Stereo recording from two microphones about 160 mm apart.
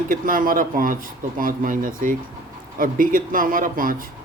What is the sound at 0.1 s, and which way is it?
A man's voice, 60° right (ahead or behind).